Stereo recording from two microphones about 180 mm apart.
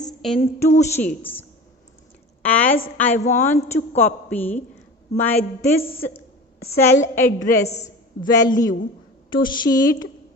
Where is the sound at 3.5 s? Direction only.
35° left (ahead or behind).